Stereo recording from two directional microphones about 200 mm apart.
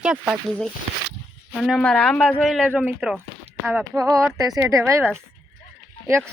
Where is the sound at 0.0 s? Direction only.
5° right (ahead or behind).